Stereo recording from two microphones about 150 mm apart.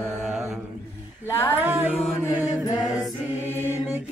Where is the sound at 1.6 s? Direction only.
10° right (ahead or behind).